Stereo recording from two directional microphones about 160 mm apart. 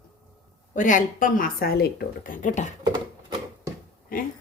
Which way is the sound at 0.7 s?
55° left (ahead or behind).